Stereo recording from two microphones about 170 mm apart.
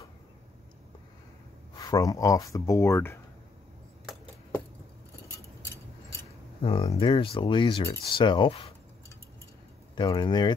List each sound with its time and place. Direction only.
1.8 s speech: 20° left (ahead or behind)
6.6 s speech: 30° left (ahead or behind)
9.9 s speech: 25° left (ahead or behind)